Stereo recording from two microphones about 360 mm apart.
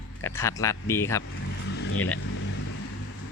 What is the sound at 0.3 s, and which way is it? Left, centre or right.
Speech, centre.